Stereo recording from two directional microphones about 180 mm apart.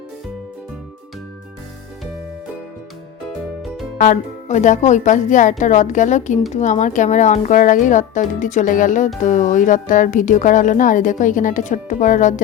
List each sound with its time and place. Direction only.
3.9 s speech: 45° left (ahead or behind)